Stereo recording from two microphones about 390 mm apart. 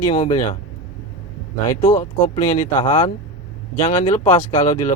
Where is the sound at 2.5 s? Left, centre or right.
Centre.